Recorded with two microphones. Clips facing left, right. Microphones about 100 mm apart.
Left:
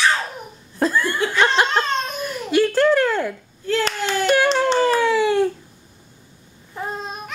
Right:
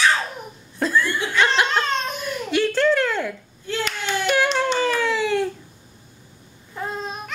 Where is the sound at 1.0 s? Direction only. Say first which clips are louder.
Left 3 dB; 45° left (ahead or behind).